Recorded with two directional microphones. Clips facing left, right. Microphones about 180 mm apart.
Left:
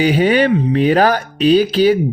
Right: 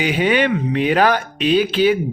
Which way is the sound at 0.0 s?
40° left (ahead or behind).